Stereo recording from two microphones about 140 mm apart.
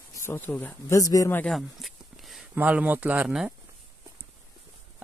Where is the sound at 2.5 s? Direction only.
10° right (ahead or behind).